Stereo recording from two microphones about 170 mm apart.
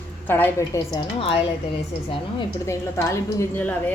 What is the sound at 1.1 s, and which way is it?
Speech, 35° left (ahead or behind).